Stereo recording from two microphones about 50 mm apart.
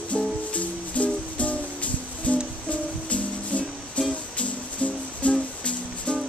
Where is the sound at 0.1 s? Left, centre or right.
Left.